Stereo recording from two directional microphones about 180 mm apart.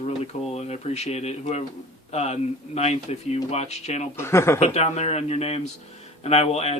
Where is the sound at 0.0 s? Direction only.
35° left (ahead or behind).